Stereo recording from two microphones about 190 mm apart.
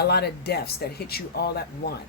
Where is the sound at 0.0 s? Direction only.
60° left (ahead or behind).